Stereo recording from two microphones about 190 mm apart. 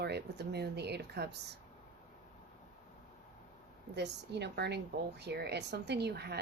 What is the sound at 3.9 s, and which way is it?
Speech, 65° right (ahead or behind).